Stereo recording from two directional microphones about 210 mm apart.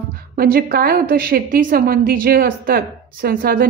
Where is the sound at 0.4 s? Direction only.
45° right (ahead or behind).